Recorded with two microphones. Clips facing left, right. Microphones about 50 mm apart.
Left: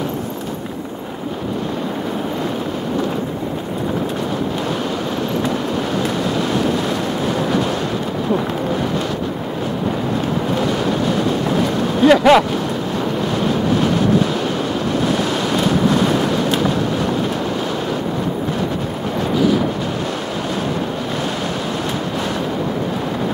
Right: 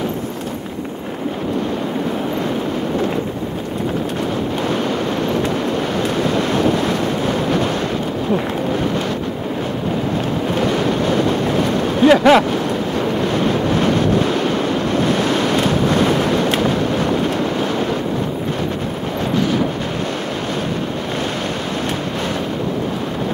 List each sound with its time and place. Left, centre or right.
10.6 s vehicle: right
12.0 s vehicle: centre
13.4 s wind noise: right
15.0 s waves: right